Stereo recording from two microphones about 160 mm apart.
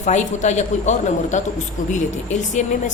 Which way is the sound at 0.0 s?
45° left (ahead or behind).